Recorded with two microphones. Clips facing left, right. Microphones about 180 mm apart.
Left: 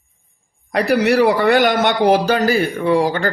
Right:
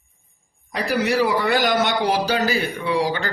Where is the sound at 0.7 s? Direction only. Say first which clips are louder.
Left 6 dB; 70° left (ahead or behind).